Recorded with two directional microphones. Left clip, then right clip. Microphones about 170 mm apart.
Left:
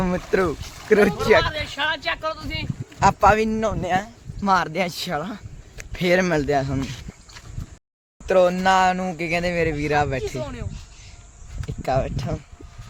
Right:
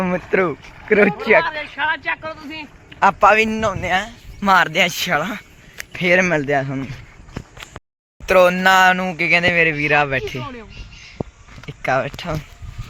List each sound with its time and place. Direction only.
0.0 s speech: 5° left (ahead or behind)
1.7 s speech: 75° left (ahead or behind)
3.0 s speech: 5° left (ahead or behind)
5.9 s speech: 20° left (ahead or behind)
6.4 s speech: 5° left (ahead or behind)
8.3 s speech: 15° right (ahead or behind)
8.9 s speech: centre (ahead or behind)
11.9 s speech: centre (ahead or behind)